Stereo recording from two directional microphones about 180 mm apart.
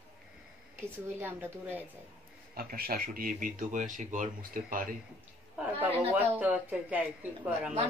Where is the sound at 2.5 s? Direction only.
55° right (ahead or behind).